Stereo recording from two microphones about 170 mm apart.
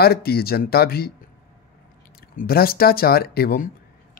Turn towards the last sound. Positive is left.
turn(degrees=60)  # may be behind; listen again after turning